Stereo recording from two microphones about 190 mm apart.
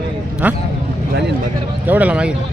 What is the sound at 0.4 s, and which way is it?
Speech, 10° right (ahead or behind).